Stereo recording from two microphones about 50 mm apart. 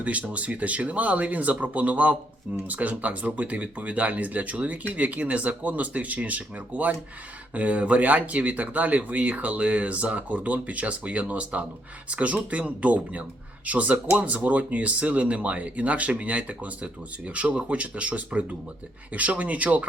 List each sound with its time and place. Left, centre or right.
0.0 s speech: right